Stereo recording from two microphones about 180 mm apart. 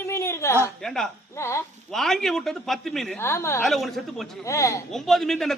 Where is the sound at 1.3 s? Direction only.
15° left (ahead or behind).